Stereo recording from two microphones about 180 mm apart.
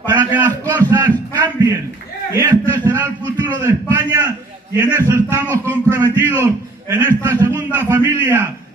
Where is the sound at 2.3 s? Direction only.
15° right (ahead or behind).